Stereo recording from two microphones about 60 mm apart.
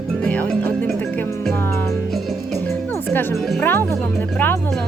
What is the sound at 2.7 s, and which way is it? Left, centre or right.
Music, left.